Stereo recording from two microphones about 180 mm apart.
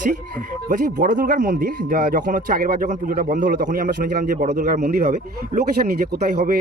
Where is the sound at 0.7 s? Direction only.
45° right (ahead or behind).